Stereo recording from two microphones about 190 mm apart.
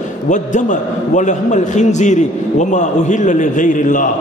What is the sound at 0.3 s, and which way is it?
A man's voice, 40° left (ahead or behind).